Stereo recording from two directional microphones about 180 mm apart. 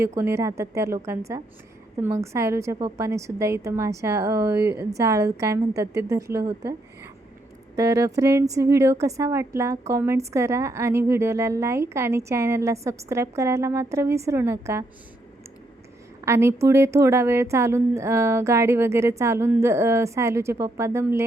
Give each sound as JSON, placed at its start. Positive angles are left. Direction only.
{"t": 0.0, "sound": "a woman's voice", "side_deg": -15}
{"t": 16.2, "sound": "a woman's voice", "side_deg": -15}